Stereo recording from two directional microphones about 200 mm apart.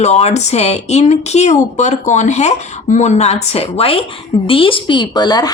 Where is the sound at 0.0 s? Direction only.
35° left (ahead or behind).